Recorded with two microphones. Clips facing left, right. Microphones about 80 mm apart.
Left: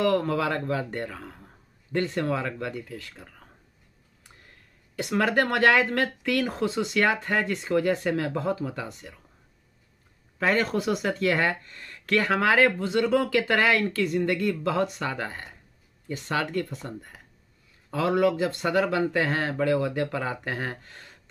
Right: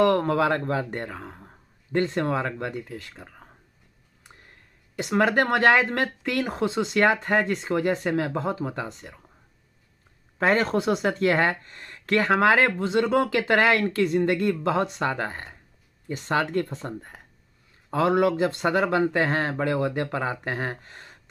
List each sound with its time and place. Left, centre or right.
0.0 s speech: right
10.4 s speech: right